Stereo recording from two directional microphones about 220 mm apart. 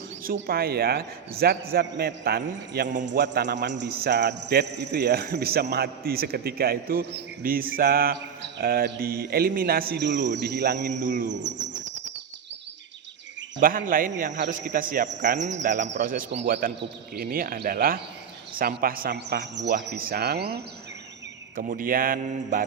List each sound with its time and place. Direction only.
0.3 s a man's voice: 45° right (ahead or behind)
10.9 s speech: 35° right (ahead or behind)
13.6 s a man's voice: 40° right (ahead or behind)